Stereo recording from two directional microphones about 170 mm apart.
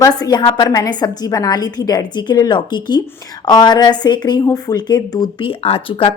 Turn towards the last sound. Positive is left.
turn(degrees=30)  # may be behind; listen again after turning